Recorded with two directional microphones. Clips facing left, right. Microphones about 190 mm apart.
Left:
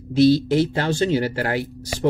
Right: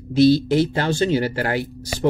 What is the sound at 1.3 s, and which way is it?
Speech, 20° right (ahead or behind).